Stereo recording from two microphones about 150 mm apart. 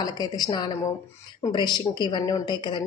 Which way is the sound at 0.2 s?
25° left (ahead or behind).